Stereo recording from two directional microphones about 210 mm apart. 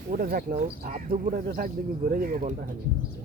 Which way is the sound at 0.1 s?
45° right (ahead or behind).